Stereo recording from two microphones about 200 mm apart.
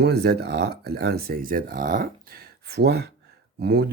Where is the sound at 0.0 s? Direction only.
55° right (ahead or behind).